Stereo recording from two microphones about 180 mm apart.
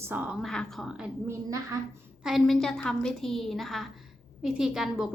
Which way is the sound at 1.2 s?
20° right (ahead or behind).